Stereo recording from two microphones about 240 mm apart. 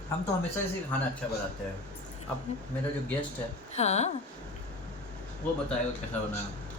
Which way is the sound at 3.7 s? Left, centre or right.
Left.